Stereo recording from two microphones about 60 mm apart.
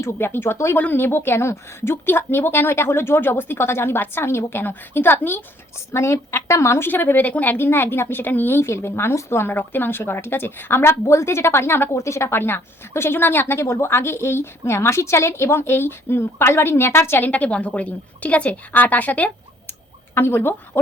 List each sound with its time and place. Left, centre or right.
0.2 s a woman's voice: left
5.7 s a woman's voice: left
6.8 s speech: left
11.0 s a woman's voice: left
11.9 s a woman's voice: left
17.2 s a woman's voice: left
20.1 s speech: left